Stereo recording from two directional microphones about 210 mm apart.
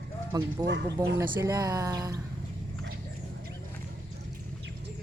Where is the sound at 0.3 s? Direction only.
20° right (ahead or behind).